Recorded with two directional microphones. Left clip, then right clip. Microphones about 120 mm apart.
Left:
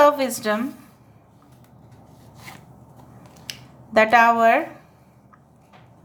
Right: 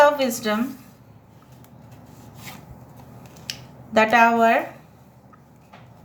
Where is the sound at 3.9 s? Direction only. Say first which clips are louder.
Left 1 dB; 35° left (ahead or behind).